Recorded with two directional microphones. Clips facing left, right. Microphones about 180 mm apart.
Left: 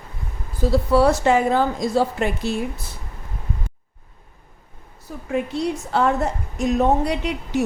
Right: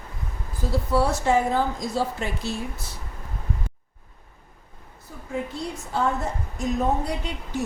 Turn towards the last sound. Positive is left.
turn(degrees=80)